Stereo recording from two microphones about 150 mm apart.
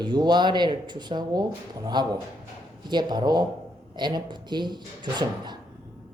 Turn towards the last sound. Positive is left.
turn(degrees=-30)  # may be behind; listen again after turning